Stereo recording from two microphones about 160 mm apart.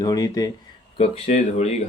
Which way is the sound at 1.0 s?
40° left (ahead or behind).